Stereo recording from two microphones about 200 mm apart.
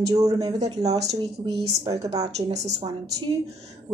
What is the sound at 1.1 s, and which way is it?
A woman's voice, 30° right (ahead or behind).